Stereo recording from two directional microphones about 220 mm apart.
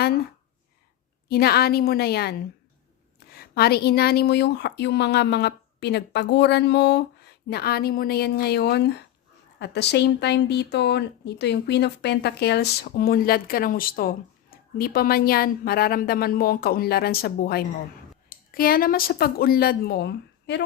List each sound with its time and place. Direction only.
1.3 s a woman's voice: 45° left (ahead or behind)